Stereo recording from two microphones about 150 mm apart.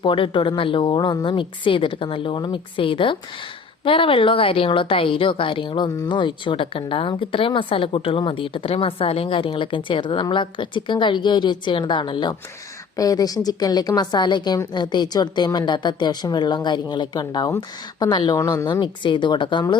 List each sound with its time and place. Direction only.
0.0 s a woman's voice: 35° left (ahead or behind)